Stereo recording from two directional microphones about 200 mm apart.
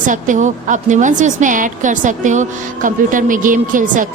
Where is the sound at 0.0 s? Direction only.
40° right (ahead or behind).